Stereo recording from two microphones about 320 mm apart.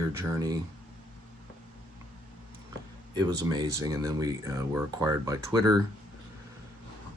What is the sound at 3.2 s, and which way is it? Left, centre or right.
Speech, centre.